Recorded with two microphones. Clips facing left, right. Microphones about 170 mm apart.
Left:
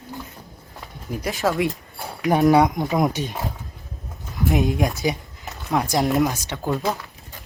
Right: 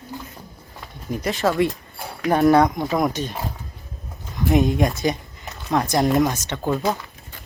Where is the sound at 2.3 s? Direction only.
15° left (ahead or behind).